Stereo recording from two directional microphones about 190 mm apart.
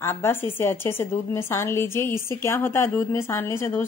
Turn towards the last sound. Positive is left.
turn(degrees=15)  # may be behind; listen again after turning